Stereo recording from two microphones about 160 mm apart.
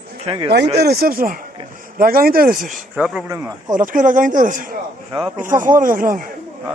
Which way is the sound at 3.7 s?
55° right (ahead or behind).